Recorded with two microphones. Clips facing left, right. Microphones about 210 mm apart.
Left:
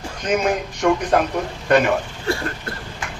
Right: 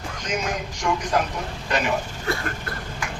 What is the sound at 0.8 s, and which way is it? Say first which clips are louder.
A man's voice: left 6 dB; 65° left (ahead or behind).